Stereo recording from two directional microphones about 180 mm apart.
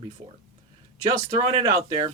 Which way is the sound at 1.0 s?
35° right (ahead or behind).